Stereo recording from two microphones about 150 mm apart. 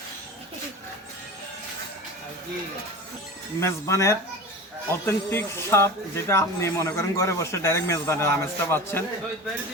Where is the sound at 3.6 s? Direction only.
20° left (ahead or behind).